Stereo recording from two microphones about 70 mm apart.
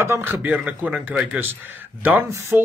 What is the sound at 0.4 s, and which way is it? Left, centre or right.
A man's voice, right.